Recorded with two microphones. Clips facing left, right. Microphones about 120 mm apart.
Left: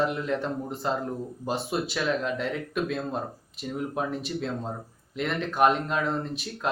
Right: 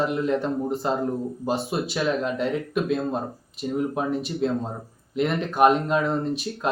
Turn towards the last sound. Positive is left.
turn(degrees=-5)  # may be behind; listen again after turning